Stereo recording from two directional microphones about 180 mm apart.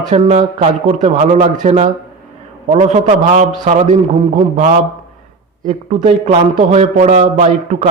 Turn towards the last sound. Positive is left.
turn(degrees=-40)  # may be behind; listen again after turning